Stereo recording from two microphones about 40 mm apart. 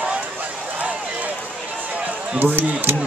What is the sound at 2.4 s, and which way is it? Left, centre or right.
Speech, right.